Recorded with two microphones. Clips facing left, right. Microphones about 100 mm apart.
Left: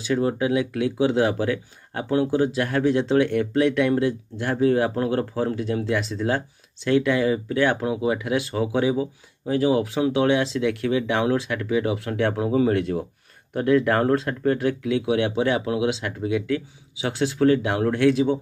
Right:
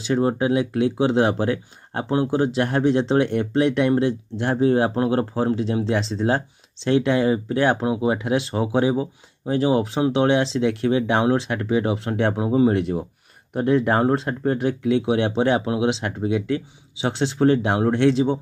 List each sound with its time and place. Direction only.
0.0 s speech: 30° right (ahead or behind)